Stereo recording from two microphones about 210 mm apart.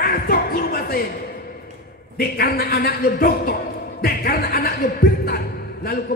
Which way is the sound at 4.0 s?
45° left (ahead or behind).